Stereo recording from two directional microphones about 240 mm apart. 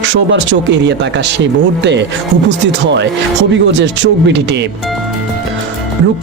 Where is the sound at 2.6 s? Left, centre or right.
Right.